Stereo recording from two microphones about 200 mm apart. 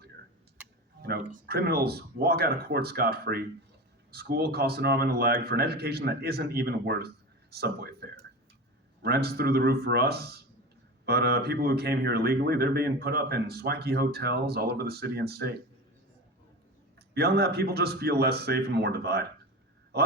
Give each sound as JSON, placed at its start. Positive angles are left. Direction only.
{"t": 1.3, "sound": "speech", "side_deg": -50}
{"t": 17.2, "sound": "speech", "side_deg": -55}